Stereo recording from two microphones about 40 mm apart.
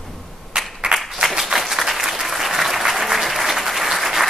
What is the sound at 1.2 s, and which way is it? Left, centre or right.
Applause, centre.